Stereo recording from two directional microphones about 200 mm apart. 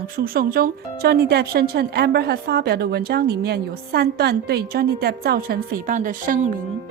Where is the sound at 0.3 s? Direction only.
50° right (ahead or behind).